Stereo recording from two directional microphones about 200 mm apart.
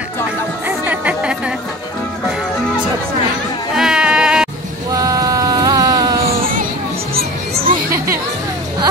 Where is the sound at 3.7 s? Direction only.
5° right (ahead or behind).